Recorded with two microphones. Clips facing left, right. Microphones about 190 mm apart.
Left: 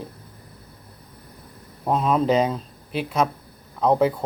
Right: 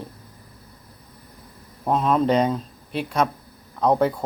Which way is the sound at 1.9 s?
5° left (ahead or behind).